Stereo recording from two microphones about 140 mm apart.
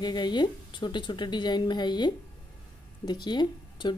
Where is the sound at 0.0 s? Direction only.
30° left (ahead or behind).